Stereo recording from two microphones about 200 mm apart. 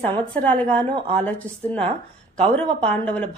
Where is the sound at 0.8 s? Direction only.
25° right (ahead or behind).